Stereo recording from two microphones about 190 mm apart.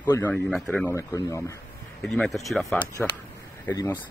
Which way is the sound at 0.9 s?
15° left (ahead or behind).